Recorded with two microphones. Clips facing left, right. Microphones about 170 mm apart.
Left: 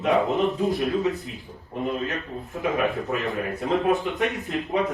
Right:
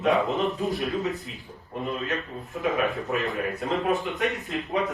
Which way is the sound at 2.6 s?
20° left (ahead or behind).